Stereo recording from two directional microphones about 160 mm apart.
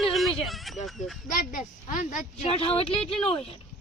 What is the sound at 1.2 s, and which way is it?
Speech, 55° left (ahead or behind).